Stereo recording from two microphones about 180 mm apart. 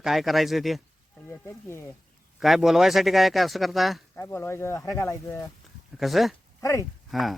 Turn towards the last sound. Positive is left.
turn(degrees=0)  # may be behind; listen again after turning